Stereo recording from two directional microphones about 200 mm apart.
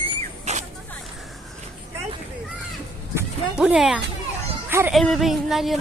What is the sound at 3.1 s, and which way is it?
Dog, 5° right (ahead or behind).